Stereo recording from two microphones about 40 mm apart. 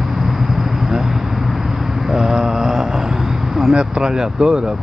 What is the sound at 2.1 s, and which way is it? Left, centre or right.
Mantra, centre.